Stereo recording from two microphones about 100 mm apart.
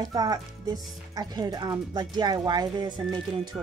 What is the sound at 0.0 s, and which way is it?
Speech, 40° right (ahead or behind).